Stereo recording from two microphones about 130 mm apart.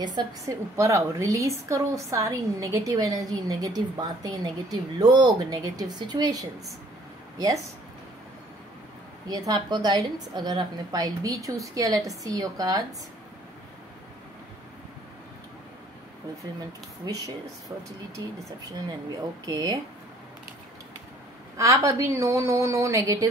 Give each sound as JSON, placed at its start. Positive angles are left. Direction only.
{"t": 0.0, "sound": "a woman's voice", "side_deg": -30}
{"t": 9.3, "sound": "a woman's voice", "side_deg": -30}
{"t": 17.0, "sound": "a woman's voice", "side_deg": -30}
{"t": 21.8, "sound": "a woman's voice", "side_deg": -25}